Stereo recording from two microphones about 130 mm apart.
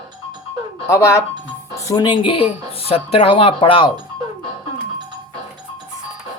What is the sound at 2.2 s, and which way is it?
Speech, 45° left (ahead or behind).